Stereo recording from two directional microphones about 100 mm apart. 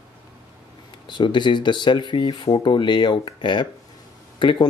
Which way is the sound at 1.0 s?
50° left (ahead or behind).